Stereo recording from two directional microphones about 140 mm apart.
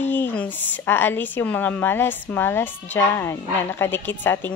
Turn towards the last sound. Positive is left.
turn(degrees=15)  # may be behind; listen again after turning